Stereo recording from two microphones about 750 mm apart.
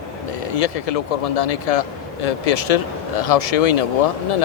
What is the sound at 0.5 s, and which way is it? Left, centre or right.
Speech, left.